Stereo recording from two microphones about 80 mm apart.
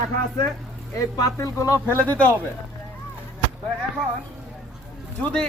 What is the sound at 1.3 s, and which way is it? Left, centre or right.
Speech, left.